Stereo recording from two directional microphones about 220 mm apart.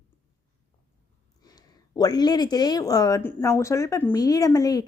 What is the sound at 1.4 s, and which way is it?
Speech, 15° left (ahead or behind).